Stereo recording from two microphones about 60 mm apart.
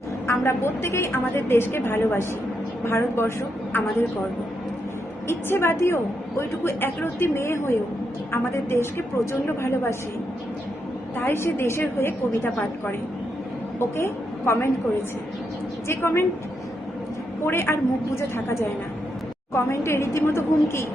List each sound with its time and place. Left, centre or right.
0.3 s a woman's voice: left
5.3 s a woman's voice: left
11.2 s a woman's voice: left
13.7 s a woman's voice: left
15.9 s a woman's voice: left
17.4 s a woman's voice: left